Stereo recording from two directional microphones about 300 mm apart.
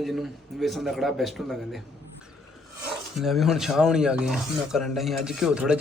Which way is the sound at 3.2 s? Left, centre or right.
Centre.